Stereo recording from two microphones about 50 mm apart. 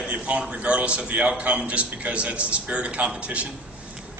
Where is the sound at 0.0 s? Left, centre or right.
Right.